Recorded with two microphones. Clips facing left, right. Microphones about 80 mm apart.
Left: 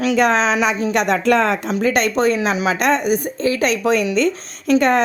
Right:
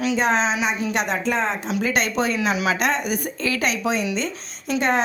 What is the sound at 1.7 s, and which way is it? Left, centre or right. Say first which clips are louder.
Speech: left 5 dB; left.